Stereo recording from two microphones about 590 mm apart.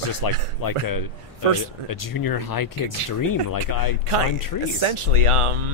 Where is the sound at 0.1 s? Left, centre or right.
Left.